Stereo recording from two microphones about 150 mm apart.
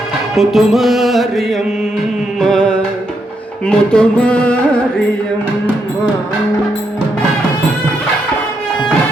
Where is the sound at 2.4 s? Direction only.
5° left (ahead or behind).